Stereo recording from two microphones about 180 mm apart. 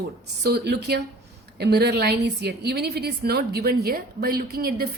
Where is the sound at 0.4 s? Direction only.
65° right (ahead or behind).